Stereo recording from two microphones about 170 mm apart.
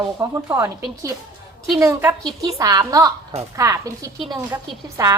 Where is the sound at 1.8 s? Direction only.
15° right (ahead or behind).